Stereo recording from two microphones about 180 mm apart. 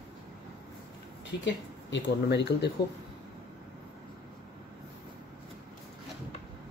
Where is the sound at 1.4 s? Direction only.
80° left.